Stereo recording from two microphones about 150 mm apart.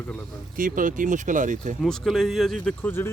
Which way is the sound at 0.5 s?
65° right (ahead or behind).